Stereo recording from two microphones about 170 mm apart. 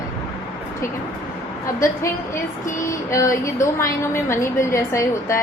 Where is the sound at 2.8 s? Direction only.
20° left (ahead or behind).